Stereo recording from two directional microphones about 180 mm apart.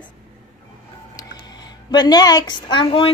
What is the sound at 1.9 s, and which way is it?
A woman's voice, 25° left (ahead or behind).